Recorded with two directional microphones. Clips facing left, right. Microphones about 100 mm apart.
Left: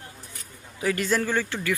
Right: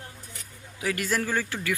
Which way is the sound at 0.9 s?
5° right (ahead or behind).